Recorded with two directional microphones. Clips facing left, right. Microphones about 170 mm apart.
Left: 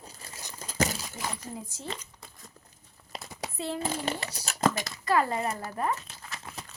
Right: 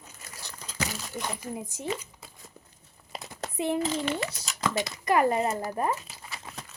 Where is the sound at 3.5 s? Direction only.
15° right (ahead or behind).